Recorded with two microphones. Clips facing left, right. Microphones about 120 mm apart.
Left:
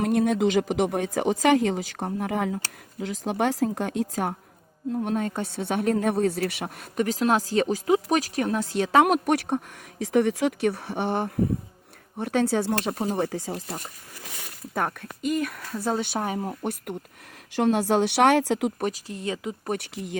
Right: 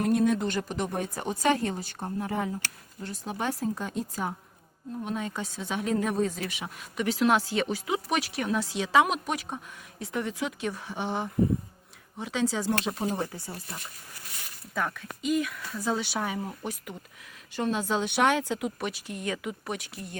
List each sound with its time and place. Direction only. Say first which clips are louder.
0.0 s speech: left 3 dB; 80° left
5.0 s speech: left 2 dB; 50° left (ahead or behind); by 9.6 s 70° left (ahead or behind)
10.0 s speech: left 10 dB; 80° left; by 13.0 s 60° left (ahead or behind)
13.1 s speech: left 7 dB; 80° left
14.7 s speech: left 3 dB; 50° left (ahead or behind)
17.5 s speech: left 7 dB; 70° left (ahead or behind)
18.8 s speech: left 5 dB; 40° left (ahead or behind)
19.6 s speech: left 6 dB; 55° left (ahead or behind)
19.9 s speech: left 6 dB; 80° left